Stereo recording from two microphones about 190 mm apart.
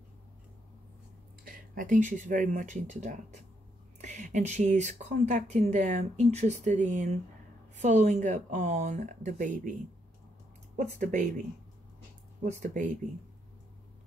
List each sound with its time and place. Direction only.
1.4 s speech: 45° right (ahead or behind)
10.8 s speech: 40° right (ahead or behind)
12.4 s speech: 40° right (ahead or behind)